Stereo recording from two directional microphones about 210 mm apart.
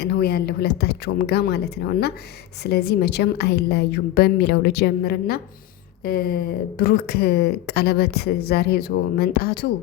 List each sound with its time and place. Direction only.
0.0 s speech: 50° left (ahead or behind)